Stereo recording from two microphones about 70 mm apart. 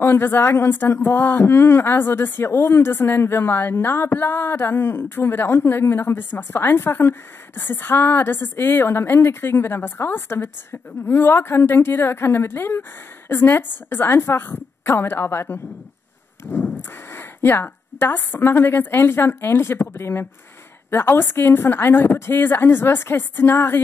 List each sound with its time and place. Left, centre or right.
0.0 s speech: left
16.5 s a sound: centre
17.1 s speech: left